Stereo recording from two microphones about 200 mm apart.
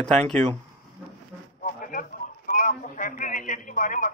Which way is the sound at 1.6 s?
40° left (ahead or behind).